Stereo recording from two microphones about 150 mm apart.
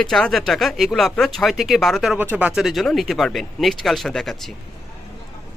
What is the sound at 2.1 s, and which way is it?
Speech, 10° right (ahead or behind).